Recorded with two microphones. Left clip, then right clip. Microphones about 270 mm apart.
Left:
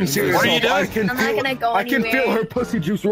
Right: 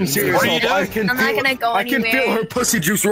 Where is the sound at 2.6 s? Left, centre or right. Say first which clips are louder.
Right 4 dB; right.